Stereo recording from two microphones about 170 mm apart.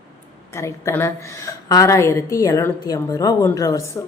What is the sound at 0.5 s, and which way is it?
A woman's voice, 15° left (ahead or behind).